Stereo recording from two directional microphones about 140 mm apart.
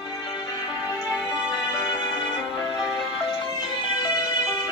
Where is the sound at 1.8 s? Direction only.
35° left (ahead or behind).